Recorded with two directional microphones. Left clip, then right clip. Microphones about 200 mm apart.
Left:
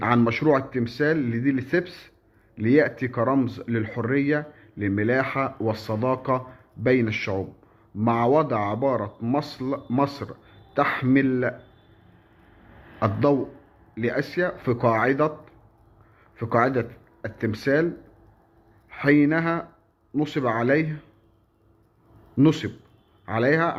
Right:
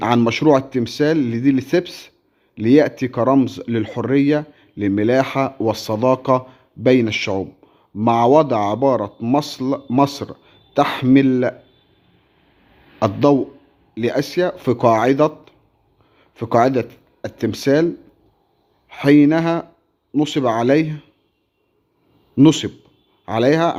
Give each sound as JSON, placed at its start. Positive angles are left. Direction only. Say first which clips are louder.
{"t": 0.0, "sound": "speech", "louder": "right 6 dB", "side_deg": -55}
{"t": 13.0, "sound": "speech", "louder": "right 6 dB", "side_deg": -55}
{"t": 18.9, "sound": "speech", "louder": "right 7 dB", "side_deg": -55}
{"t": 22.4, "sound": "speech", "louder": "right 7 dB", "side_deg": -55}